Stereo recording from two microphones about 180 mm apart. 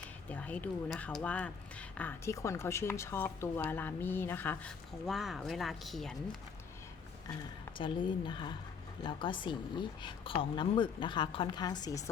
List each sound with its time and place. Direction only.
0.3 s speech: 10° left (ahead or behind)
7.8 s a woman's voice: 25° left (ahead or behind)